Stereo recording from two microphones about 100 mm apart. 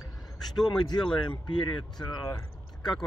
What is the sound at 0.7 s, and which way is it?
Speech, 50° left (ahead or behind).